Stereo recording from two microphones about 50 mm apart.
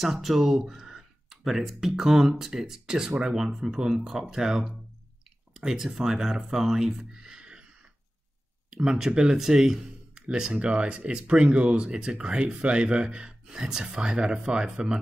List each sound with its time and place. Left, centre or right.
0.0 s speech: centre
8.7 s speech: centre
10.1 s a sound: right
10.4 s speech: centre
11.9 s speech: centre